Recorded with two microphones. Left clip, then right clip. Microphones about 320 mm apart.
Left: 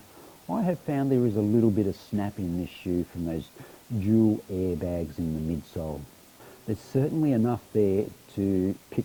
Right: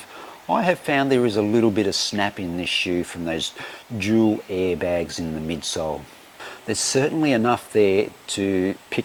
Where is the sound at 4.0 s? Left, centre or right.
Centre.